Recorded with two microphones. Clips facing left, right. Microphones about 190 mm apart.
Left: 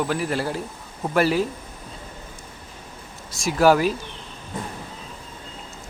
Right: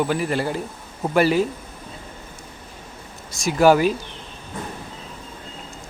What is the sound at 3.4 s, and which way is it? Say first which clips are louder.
Speech: right 2 dB; centre (ahead or behind).